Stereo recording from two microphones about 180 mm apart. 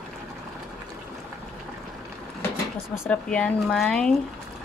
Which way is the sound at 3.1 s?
5° left (ahead or behind).